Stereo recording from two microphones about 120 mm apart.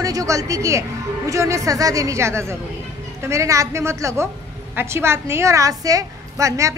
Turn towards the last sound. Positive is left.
turn(degrees=-25)  # may be behind; listen again after turning